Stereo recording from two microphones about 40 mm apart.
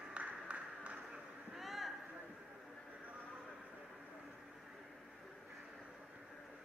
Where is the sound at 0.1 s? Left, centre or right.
Right.